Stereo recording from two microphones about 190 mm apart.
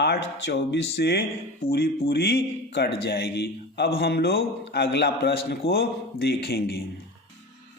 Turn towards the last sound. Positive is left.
turn(degrees=55)  # may be behind; listen again after turning